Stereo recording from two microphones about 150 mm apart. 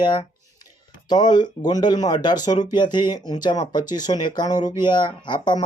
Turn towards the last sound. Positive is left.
turn(degrees=30)  # may be behind; listen again after turning